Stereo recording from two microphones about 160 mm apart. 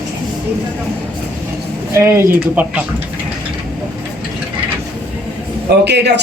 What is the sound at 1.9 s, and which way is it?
Speech, 15° right (ahead or behind).